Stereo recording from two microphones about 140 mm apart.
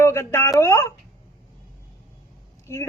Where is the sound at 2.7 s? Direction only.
20° left (ahead or behind).